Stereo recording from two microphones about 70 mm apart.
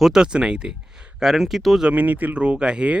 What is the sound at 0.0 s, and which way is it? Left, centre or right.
Speech, centre.